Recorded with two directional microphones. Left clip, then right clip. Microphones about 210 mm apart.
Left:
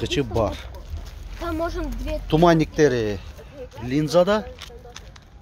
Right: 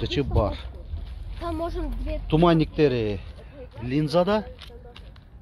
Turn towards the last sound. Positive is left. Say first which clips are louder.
# left 4 dB
turn(degrees=-10)  # may be behind; listen again after turning